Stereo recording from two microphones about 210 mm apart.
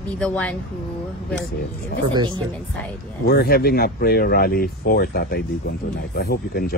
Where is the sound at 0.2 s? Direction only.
5° left (ahead or behind).